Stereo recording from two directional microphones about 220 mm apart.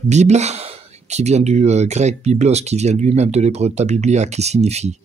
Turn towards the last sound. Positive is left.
turn(degrees=-30)  # may be behind; listen again after turning